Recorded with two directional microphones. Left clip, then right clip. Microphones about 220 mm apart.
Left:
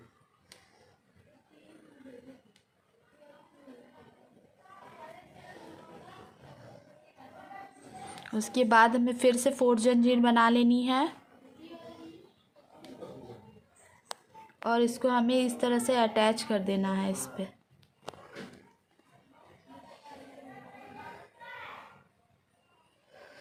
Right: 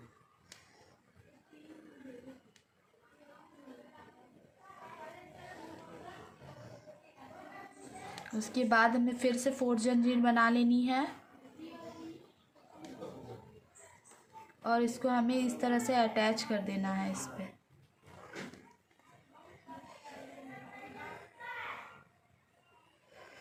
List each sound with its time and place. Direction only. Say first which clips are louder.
8.3 s a woman's voice: left 6 dB; 45° left (ahead or behind)
14.6 s a woman's voice: left 4 dB; 40° left (ahead or behind)